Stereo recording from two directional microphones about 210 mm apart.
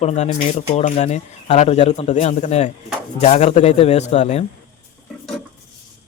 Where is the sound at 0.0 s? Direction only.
30° left (ahead or behind).